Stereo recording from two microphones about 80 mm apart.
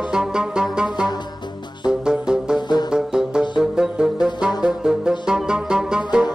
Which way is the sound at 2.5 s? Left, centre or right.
Left.